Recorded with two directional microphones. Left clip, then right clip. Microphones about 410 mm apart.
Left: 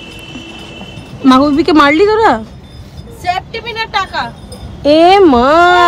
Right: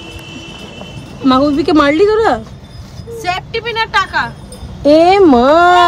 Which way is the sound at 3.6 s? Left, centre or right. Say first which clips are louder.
Right 3 dB; centre.